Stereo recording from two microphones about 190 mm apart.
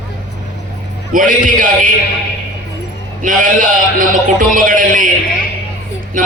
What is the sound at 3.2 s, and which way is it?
A man's voice, 45° right (ahead or behind).